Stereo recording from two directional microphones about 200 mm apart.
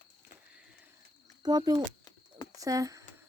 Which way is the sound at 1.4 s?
20° right (ahead or behind).